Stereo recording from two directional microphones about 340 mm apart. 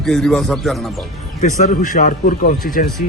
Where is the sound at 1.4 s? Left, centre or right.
Left.